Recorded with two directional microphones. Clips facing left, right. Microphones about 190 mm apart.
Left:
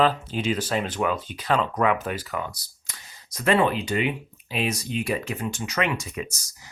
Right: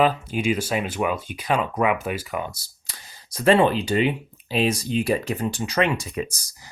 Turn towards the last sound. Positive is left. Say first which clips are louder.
# right 3 dB
turn(degrees=-30)  # may be behind; listen again after turning